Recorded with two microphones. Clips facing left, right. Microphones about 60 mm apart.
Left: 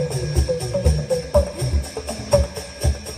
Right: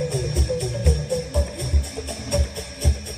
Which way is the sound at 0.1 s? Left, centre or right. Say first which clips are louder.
Left 2 dB; left.